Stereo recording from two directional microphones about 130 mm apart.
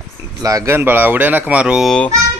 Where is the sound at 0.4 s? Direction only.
25° right (ahead or behind); by 2.0 s 5° right (ahead or behind).